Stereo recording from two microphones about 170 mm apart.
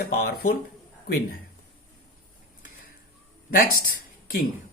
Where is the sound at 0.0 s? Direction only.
65° left (ahead or behind).